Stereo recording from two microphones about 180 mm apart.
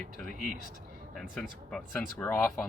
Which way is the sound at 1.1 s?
5° left (ahead or behind).